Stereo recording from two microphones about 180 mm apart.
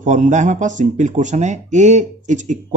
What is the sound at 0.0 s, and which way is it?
Speech, 40° right (ahead or behind).